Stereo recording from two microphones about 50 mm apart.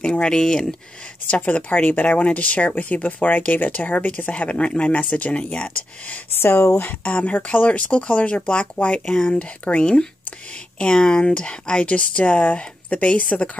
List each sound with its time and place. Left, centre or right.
0.0 s speech: centre
1.2 s speech: left
6.3 s speech: left
6.8 s speech: left
7.2 s speech: left